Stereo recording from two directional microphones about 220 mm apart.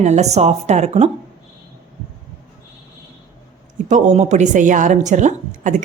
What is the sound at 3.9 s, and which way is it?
A woman's voice, 30° right (ahead or behind).